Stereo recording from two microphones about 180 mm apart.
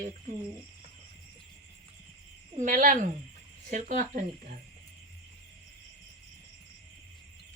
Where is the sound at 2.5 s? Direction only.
45° right (ahead or behind).